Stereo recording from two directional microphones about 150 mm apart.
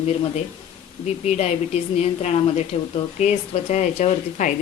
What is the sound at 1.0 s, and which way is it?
Speech, 50° left (ahead or behind).